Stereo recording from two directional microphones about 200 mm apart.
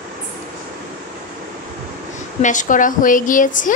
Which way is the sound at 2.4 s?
40° left (ahead or behind).